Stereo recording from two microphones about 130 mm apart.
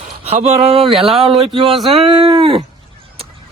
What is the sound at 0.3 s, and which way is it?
Speech, 60° right (ahead or behind).